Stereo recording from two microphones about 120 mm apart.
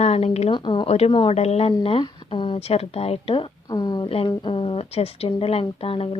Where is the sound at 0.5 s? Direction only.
40° left (ahead or behind).